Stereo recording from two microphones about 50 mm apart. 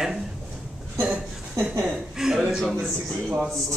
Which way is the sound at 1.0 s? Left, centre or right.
Right.